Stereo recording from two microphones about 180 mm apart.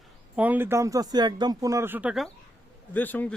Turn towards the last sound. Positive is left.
turn(degrees=10)  # may be behind; listen again after turning